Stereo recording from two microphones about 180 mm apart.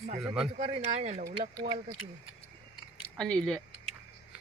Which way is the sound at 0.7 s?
40° right (ahead or behind).